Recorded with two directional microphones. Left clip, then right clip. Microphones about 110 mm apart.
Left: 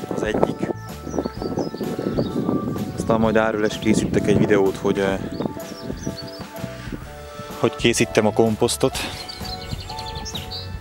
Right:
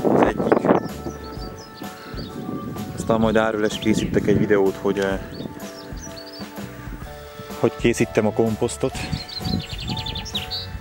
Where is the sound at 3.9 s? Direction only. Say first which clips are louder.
Left 1 dB; 15° left (ahead or behind).